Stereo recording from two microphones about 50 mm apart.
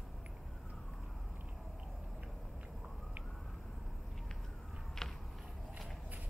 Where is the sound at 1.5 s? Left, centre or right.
Centre.